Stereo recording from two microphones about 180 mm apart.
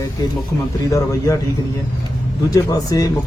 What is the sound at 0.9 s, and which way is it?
Speech, 15° left (ahead or behind).